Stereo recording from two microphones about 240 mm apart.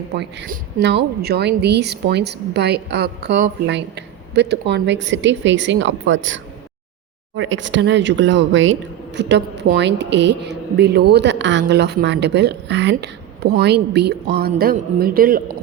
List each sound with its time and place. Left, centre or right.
0.2 s a woman's voice: right